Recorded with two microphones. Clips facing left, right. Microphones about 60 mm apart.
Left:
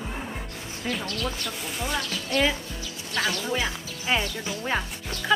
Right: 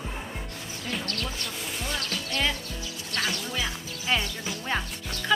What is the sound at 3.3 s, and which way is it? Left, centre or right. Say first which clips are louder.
Speech: left 4 dB; left.